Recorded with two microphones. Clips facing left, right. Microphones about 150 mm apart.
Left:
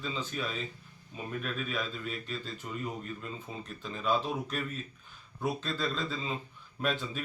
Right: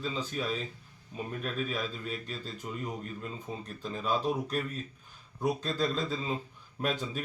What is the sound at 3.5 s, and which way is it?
Speech, 10° left (ahead or behind).